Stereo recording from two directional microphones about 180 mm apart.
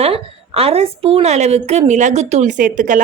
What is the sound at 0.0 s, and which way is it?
A woman's voice, 35° right (ahead or behind).